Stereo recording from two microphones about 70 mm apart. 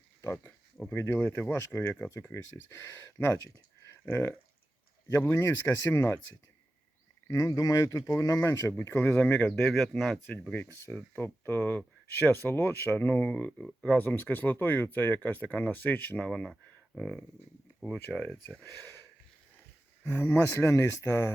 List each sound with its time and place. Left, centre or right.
0.2 s a sound: left
0.9 s speech: left
1.5 s speech: left
7.3 s speech: left
8.8 s speech: left
9.6 s speech: centre
10.5 s speech: left; by 18.0 s centre
20.1 s speech: left
20.7 s speech: left